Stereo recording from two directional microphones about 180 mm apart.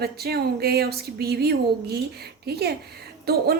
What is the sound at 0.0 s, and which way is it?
A woman's voice, 60° right (ahead or behind).